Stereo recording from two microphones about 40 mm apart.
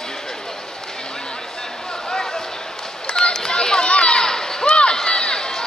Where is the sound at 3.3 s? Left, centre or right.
Centre.